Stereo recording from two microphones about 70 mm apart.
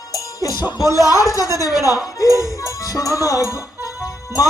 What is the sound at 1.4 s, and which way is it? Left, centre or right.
Music, right.